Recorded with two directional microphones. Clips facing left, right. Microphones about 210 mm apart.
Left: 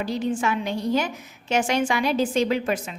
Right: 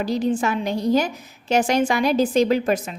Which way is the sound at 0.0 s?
40° right (ahead or behind).